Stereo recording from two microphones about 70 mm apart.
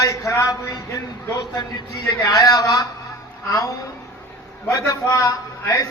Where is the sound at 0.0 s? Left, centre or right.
Left.